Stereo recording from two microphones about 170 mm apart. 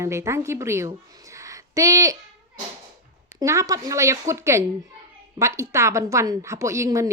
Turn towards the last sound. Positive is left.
turn(degrees=-15)  # may be behind; listen again after turning